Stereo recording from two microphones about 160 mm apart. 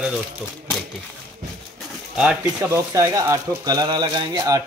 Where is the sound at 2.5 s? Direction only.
20° right (ahead or behind).